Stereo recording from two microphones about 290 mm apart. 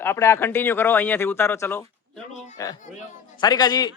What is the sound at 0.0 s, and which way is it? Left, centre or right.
Speech, centre.